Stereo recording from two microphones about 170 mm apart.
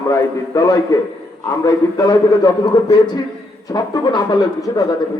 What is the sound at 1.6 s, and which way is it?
A man's voice, 20° left (ahead or behind).